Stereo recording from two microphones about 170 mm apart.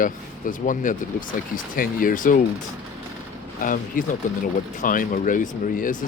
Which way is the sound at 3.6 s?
50° left (ahead or behind).